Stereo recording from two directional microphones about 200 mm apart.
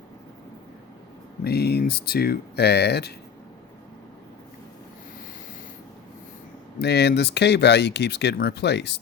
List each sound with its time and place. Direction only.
1.5 s speech: 55° left (ahead or behind)
6.7 s speech: 55° left (ahead or behind)